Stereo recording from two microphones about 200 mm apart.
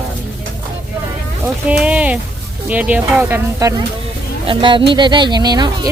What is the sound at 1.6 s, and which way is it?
Speech, 5° right (ahead or behind).